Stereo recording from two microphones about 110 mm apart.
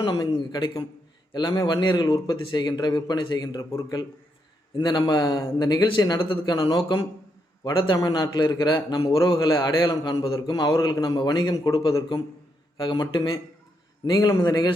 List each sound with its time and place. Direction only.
0.0 s a man's voice: 40° left (ahead or behind)